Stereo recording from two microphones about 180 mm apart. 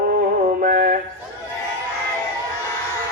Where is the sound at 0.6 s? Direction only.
50° right (ahead or behind).